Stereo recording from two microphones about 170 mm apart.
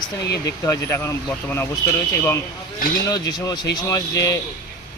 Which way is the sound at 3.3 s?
25° left (ahead or behind).